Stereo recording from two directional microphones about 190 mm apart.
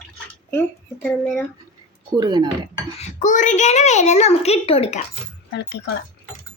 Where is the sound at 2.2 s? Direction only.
20° right (ahead or behind).